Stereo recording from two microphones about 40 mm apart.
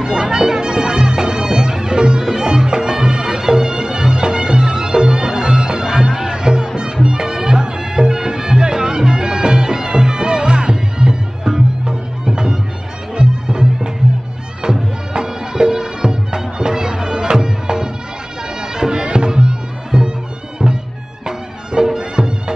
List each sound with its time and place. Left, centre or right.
0.0 s music: centre
18.6 s bagpipes: centre
20.6 s music: right